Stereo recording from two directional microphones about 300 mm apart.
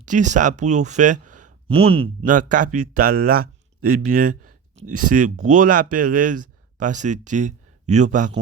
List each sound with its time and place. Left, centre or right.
0.0 s speech: right